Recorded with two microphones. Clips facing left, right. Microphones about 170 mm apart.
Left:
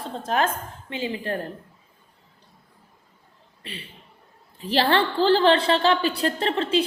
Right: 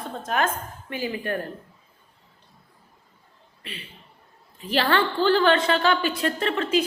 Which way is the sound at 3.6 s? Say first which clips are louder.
Left 1 dB; 35° left (ahead or behind).